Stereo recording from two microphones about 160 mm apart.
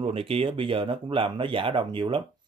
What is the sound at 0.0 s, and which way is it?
Speech, 35° right (ahead or behind).